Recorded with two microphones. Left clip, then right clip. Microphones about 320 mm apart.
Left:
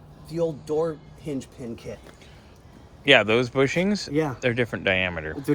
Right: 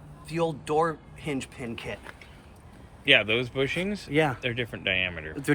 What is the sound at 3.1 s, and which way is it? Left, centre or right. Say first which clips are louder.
Speech: left 4 dB; centre.